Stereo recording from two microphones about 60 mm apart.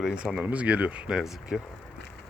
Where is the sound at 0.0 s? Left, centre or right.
Centre.